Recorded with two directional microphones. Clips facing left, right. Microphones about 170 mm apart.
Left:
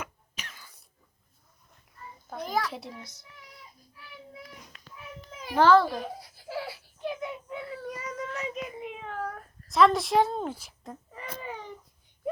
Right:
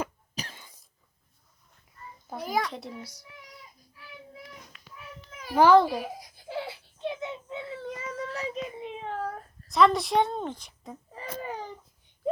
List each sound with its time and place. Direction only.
0.0 s cough: 35° right (ahead or behind)
2.3 s a child's voice: 10° right (ahead or behind)
2.6 s a woman's voice: 5° left (ahead or behind)
3.0 s a child's voice: 10° right (ahead or behind)
5.5 s giggle: 15° right (ahead or behind); by 9.4 s 30° right (ahead or behind)
9.6 s a woman's voice: centre (ahead or behind)
11.3 s a sound: 45° right (ahead or behind)